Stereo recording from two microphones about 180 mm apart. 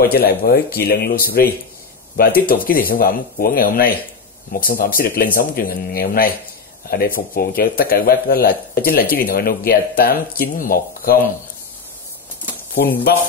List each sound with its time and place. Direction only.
0.0 s a man's voice: 60° left (ahead or behind)